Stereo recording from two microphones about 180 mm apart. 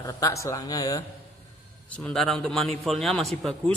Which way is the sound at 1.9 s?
5° left (ahead or behind).